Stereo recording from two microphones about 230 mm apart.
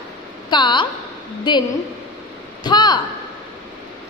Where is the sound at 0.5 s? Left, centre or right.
Centre.